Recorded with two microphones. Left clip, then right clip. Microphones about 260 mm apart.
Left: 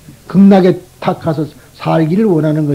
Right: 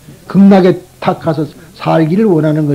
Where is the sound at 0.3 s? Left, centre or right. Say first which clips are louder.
Right 1 dB; left.